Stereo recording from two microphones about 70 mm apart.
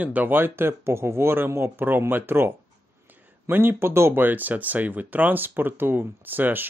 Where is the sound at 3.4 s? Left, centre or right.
Right.